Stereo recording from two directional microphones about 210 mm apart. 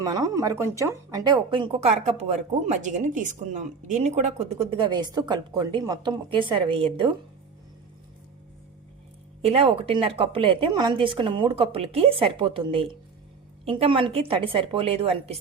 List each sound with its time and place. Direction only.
0.0 s speech: 20° right (ahead or behind)
9.5 s speech: 25° right (ahead or behind)